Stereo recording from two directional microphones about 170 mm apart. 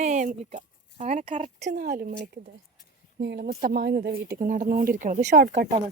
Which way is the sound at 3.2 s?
85° right.